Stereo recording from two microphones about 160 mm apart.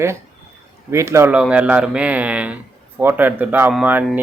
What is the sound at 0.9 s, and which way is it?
Speech, 15° right (ahead or behind).